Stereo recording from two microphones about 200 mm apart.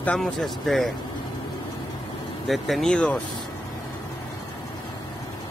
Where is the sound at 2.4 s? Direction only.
Centre (ahead or behind).